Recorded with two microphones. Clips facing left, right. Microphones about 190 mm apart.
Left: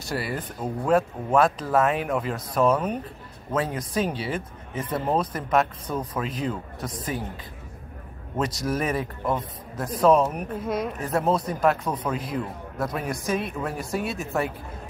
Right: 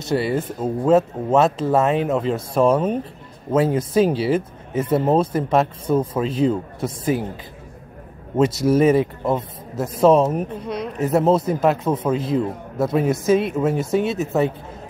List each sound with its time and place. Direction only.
0.0 s speech: 25° right (ahead or behind)
8.4 s speech: 25° right (ahead or behind)
10.5 s speech: 5° left (ahead or behind)
11.0 s speech: 25° right (ahead or behind)